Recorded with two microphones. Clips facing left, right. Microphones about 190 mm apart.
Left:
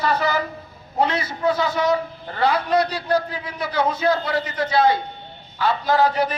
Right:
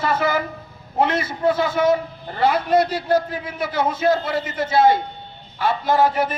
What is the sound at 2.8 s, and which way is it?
Speech, 50° right (ahead or behind).